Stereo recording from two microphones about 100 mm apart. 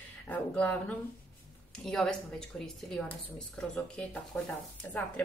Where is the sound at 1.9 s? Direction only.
5° left (ahead or behind).